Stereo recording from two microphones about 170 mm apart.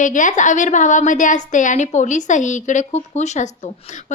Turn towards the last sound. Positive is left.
turn(degrees=45)  # may be behind; listen again after turning